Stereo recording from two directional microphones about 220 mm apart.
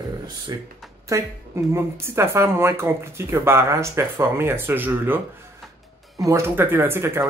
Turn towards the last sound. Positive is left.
turn(degrees=-10)  # may be behind; listen again after turning